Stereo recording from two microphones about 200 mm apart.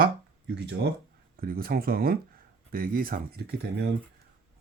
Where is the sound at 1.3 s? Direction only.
45° right (ahead or behind).